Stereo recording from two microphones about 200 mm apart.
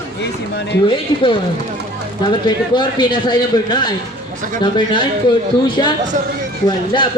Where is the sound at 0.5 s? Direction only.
60° left (ahead or behind).